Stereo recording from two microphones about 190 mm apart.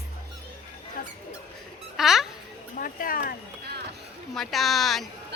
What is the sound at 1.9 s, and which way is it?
Speech, centre (ahead or behind).